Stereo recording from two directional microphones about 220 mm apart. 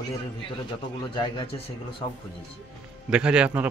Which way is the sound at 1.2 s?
25° left (ahead or behind).